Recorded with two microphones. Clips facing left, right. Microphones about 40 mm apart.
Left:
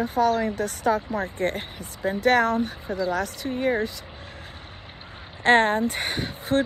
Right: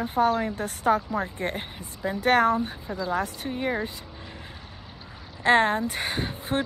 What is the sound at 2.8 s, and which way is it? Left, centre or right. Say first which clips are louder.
Speech: left 4 dB; left.